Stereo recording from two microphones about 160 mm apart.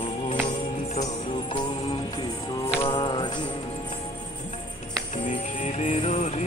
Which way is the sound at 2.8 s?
30° left (ahead or behind).